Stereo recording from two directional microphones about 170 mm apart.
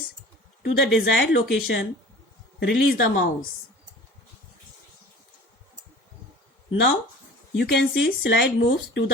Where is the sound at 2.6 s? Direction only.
80° left.